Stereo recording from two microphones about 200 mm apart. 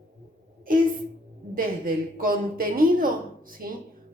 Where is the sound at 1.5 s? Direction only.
45° right (ahead or behind).